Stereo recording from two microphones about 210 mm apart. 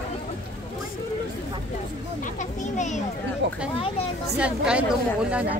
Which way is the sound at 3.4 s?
55° right (ahead or behind).